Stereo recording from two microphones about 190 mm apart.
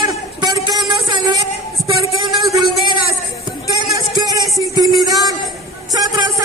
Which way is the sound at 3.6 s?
20° right (ahead or behind).